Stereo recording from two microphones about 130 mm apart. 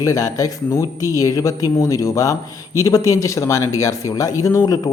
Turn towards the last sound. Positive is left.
turn(degrees=30)  # may be behind; listen again after turning